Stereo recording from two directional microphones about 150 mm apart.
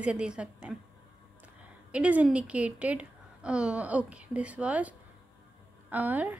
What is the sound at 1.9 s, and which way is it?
A woman's voice, 10° right (ahead or behind).